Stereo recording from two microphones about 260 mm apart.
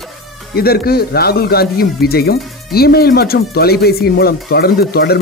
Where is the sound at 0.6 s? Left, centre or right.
Left.